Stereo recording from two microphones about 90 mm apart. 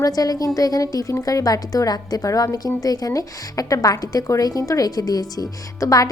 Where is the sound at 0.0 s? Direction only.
45° left (ahead or behind).